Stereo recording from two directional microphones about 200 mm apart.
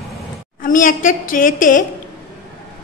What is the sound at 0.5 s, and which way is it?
A woman's voice, 40° left (ahead or behind).